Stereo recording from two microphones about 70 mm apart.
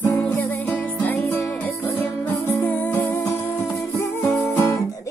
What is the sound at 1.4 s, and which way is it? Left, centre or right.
Music, centre.